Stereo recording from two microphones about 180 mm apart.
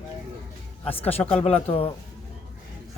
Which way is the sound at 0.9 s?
35° left (ahead or behind).